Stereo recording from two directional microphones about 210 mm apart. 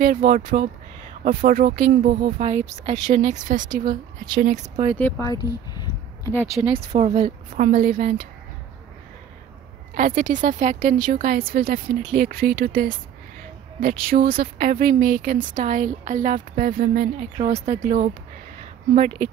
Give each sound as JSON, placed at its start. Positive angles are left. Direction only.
{"t": 0.0, "sound": "speech", "side_deg": -40}
{"t": 4.9, "sound": "speech", "side_deg": 5}
{"t": 5.2, "sound": "a sound", "side_deg": 20}
{"t": 6.6, "sound": "speech", "side_deg": -25}
{"t": 9.9, "sound": "speech", "side_deg": -40}